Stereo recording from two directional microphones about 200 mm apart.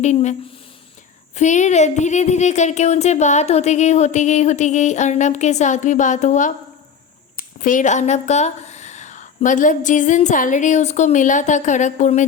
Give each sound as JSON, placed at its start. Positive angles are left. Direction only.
{"t": 0.0, "sound": "speech", "side_deg": 35}
{"t": 1.4, "sound": "speech", "side_deg": 35}